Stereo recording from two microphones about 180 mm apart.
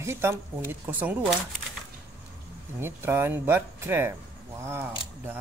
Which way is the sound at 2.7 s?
15° right (ahead or behind).